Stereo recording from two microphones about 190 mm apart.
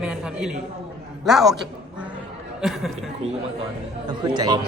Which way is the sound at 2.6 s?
Centre (ahead or behind).